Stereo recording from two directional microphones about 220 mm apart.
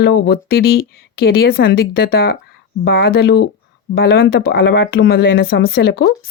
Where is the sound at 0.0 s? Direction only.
45° left (ahead or behind).